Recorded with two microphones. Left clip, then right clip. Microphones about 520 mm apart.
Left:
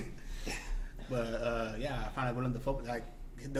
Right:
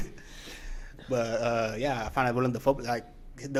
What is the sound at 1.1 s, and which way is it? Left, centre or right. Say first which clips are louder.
Speech: right 7 dB; right.